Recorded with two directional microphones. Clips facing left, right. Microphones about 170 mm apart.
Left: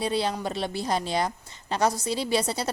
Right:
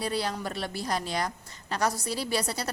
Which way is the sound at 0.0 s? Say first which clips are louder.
Left 4 dB; 25° left (ahead or behind).